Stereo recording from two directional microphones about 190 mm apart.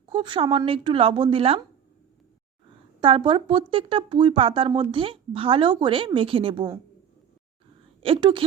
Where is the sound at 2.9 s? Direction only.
30° right (ahead or behind).